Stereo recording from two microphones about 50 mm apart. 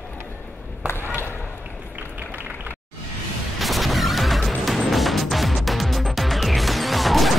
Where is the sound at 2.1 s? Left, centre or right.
Right.